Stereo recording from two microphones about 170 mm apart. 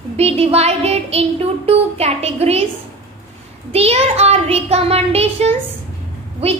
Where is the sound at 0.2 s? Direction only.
35° right (ahead or behind).